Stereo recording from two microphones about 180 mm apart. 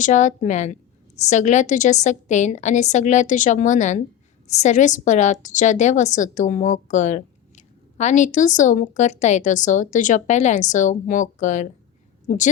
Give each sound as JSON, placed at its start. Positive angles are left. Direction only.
{"t": 0.0, "sound": "a woman's voice", "side_deg": 45}